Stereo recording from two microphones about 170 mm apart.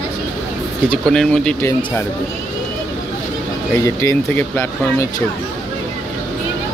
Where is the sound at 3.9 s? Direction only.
15° left (ahead or behind).